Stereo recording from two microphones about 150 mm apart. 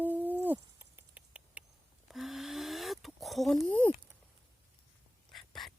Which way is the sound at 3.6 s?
10° left (ahead or behind).